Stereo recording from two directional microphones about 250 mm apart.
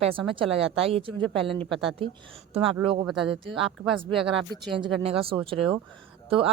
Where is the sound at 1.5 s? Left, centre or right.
Centre.